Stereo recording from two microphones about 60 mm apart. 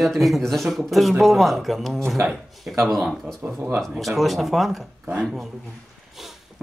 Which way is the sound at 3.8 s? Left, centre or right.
Centre.